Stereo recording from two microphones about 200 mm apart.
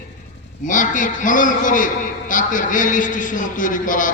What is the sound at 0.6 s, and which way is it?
A man's voice, 40° left (ahead or behind).